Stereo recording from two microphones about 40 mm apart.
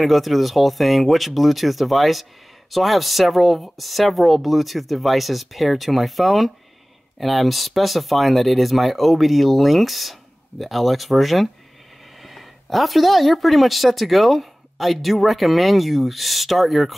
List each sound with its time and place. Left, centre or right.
0.0 s speech: centre